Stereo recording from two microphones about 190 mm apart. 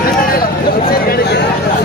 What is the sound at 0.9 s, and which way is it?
Speech, 50° left (ahead or behind).